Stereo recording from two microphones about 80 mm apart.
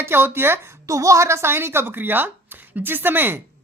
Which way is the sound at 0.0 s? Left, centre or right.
Right.